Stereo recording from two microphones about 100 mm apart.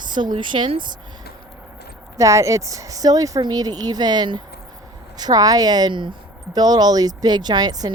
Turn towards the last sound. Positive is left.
turn(degrees=-40)  # may be behind; listen again after turning